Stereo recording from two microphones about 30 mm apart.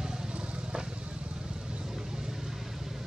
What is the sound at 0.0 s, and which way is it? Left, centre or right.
Vehicle, right.